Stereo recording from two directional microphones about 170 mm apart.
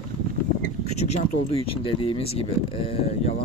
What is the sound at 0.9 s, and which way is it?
Speech, 40° left (ahead or behind).